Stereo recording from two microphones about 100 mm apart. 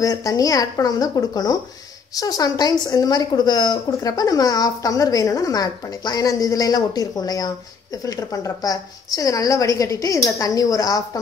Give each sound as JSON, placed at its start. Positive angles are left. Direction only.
{"t": 0.0, "sound": "a woman's voice", "side_deg": 35}